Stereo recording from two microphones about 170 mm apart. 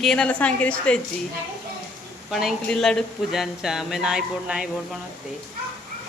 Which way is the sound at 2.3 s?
Centre (ahead or behind).